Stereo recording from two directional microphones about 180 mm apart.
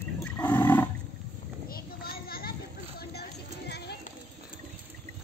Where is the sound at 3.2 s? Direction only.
65° left (ahead or behind).